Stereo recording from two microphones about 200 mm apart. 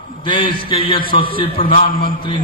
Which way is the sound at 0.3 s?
25° left (ahead or behind).